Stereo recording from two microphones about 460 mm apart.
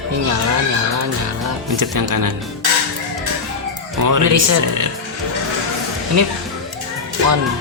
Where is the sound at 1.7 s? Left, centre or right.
Right.